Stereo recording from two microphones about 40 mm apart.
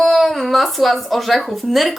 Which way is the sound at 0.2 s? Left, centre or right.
Centre.